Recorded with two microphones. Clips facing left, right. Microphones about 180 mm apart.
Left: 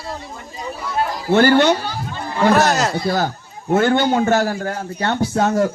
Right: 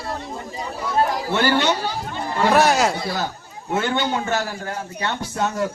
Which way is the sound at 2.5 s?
10° right (ahead or behind).